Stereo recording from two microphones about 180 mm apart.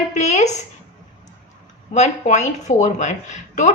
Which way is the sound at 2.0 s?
40° left (ahead or behind).